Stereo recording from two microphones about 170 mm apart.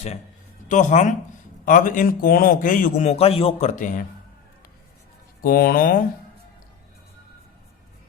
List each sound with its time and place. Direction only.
0.7 s a man's voice: 45° left (ahead or behind)
3.1 s speech: 35° left (ahead or behind)
5.4 s speech: 60° left (ahead or behind)